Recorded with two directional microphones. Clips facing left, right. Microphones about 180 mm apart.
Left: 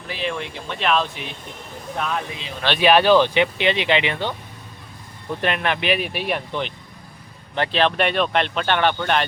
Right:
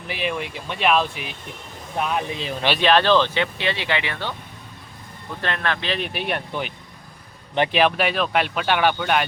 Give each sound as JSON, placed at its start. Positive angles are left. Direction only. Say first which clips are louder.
{"t": 0.1, "sound": "speech", "louder": "even", "side_deg": -15}
{"t": 2.7, "sound": "speech", "louder": "left 3 dB", "side_deg": 10}
{"t": 5.4, "sound": "speech", "louder": "left 3 dB", "side_deg": 15}
{"t": 6.0, "sound": "speech", "louder": "left 1 dB", "side_deg": 0}